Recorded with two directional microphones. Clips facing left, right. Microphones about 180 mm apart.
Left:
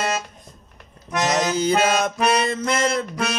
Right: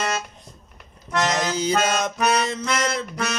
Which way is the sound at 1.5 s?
55° left (ahead or behind).